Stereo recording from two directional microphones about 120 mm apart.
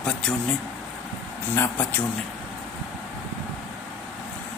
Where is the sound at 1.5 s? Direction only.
20° left (ahead or behind).